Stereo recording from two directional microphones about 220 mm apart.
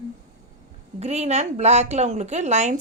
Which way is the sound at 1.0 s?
30° right (ahead or behind).